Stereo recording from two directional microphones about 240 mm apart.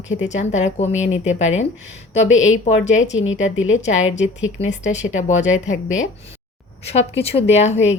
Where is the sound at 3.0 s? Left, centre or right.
Left.